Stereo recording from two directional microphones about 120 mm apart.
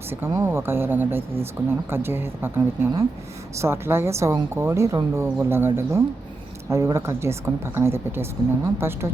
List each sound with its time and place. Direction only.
0.1 s a woman's voice: 20° right (ahead or behind)